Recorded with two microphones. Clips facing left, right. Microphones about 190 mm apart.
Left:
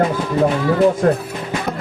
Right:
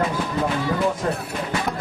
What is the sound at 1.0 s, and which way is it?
Speech, 55° left (ahead or behind).